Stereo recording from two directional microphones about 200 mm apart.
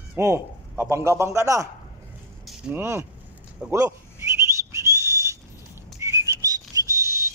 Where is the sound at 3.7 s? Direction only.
15° right (ahead or behind).